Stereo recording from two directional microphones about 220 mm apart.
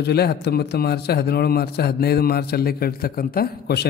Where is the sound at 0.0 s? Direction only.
45° left (ahead or behind).